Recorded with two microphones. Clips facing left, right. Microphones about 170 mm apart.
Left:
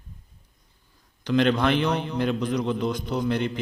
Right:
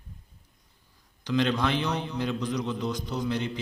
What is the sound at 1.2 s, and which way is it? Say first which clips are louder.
A man's voice: left 4 dB; 60° left (ahead or behind).